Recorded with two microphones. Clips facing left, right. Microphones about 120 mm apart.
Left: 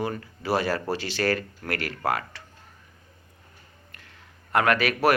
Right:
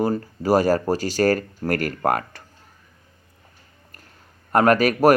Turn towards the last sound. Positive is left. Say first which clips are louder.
# right 6 dB
turn(degrees=-40)  # may be behind; listen again after turning